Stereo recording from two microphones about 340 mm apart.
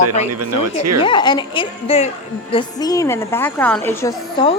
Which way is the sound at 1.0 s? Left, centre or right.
Centre.